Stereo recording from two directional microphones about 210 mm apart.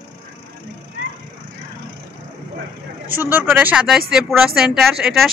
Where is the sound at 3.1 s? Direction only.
10° right (ahead or behind).